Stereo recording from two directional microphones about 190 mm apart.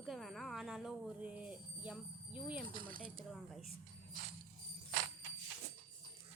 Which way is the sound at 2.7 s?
50° right (ahead or behind).